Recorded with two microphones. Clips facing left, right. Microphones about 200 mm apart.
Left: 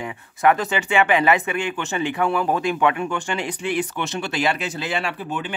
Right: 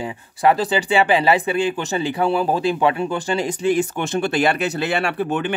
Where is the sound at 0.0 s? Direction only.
30° right (ahead or behind).